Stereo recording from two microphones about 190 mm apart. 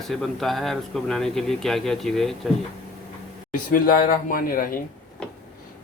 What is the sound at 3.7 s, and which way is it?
Speech, 50° left (ahead or behind).